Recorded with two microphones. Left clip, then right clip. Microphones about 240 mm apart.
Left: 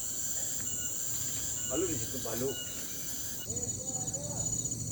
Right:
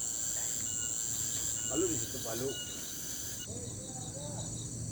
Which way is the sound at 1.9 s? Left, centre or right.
Centre.